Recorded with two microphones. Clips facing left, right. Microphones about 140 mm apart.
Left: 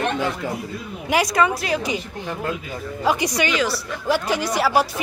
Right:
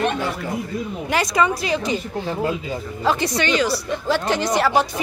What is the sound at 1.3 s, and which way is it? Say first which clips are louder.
Speech: even; 5° left (ahead or behind).